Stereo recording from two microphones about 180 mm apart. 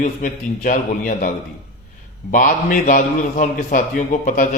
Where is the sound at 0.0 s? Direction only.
45° left (ahead or behind).